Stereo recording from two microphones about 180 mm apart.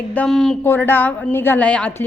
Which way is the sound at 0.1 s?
5° left (ahead or behind).